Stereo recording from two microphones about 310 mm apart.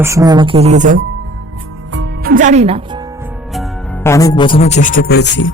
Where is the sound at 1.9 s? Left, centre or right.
Right.